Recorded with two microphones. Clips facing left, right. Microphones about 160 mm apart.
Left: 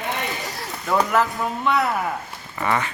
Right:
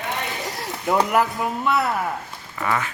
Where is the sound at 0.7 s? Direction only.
15° right (ahead or behind).